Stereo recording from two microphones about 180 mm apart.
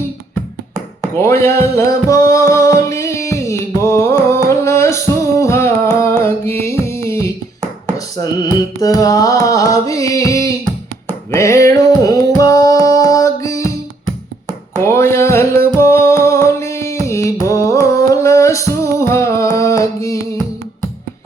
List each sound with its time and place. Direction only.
1.1 s music: 15° left (ahead or behind)
14.8 s music: 15° left (ahead or behind)